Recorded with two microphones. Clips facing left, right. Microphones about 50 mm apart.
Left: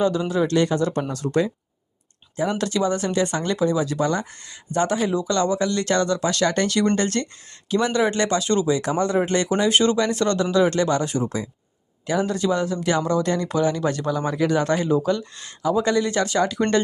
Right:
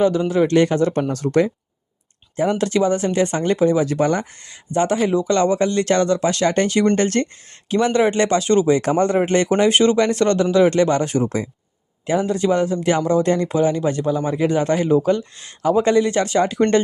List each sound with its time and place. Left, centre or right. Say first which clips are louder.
0.0 s speech: right 4 dB; right
4.7 s speech: right 4 dB; right
6.9 s speech: right 4 dB; right
12.0 s speech: right 3 dB; right
15.0 s speech: right 4 dB; right